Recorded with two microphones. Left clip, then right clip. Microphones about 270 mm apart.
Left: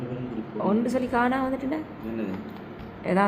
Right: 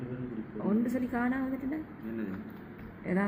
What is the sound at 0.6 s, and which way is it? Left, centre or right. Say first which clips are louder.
A woman's voice: left 7 dB; centre.